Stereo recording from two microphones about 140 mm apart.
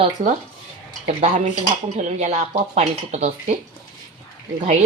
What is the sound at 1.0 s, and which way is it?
Speech, 50° right (ahead or behind).